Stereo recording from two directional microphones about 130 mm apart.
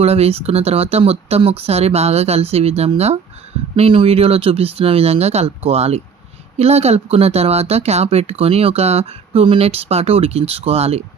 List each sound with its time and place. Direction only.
0.0 s speech: 50° right (ahead or behind)